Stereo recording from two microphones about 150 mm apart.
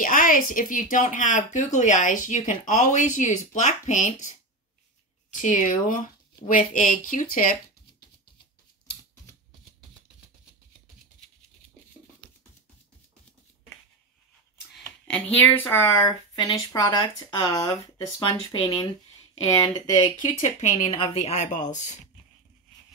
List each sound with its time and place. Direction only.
0.0 s speech: 65° left (ahead or behind)
14.8 s speech: 5° left (ahead or behind)
16.3 s speech: 25° left (ahead or behind)
18.6 s speech: 40° left (ahead or behind)
19.4 s speech: 25° left (ahead or behind); by 21.9 s 55° left (ahead or behind)